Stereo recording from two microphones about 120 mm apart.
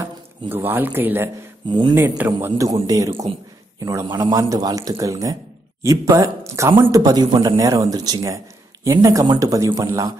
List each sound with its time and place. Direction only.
0.0 s speech: 15° right (ahead or behind)
1.7 s speech: 40° right (ahead or behind)
2.0 s a man's voice: 15° right (ahead or behind)